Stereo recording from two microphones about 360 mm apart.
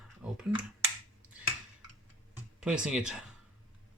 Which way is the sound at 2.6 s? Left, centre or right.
Centre.